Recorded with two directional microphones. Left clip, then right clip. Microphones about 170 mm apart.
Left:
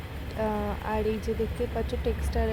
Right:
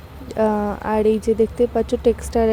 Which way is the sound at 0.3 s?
45° right (ahead or behind).